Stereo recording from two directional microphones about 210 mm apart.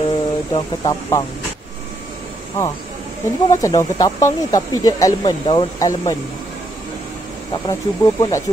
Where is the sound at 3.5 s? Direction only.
15° left (ahead or behind).